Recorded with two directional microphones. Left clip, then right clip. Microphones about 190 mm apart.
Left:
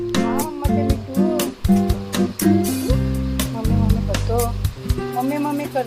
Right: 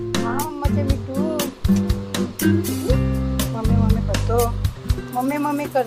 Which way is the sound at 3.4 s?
Centre (ahead or behind).